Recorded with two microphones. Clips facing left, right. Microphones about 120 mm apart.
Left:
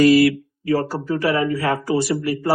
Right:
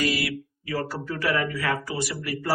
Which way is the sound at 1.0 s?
30° left (ahead or behind).